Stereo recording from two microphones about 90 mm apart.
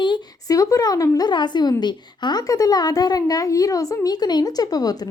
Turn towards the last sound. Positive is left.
turn(degrees=45)  # may be behind; listen again after turning